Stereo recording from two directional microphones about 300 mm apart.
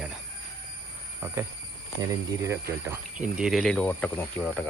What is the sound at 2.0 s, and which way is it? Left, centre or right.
Speech, centre.